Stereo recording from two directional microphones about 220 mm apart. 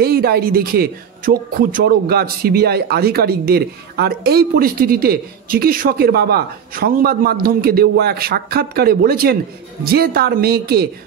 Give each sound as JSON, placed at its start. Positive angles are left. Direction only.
{"t": 0.0, "sound": "speech", "side_deg": -45}